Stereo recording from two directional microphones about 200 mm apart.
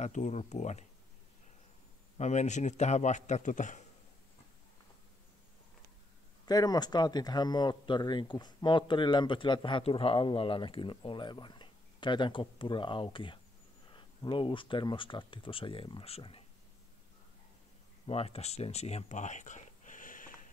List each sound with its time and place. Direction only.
0.0 s a man's voice: 35° left (ahead or behind)
2.1 s a man's voice: 35° left (ahead or behind)
6.4 s speech: 20° left (ahead or behind)
18.0 s speech: 30° left (ahead or behind)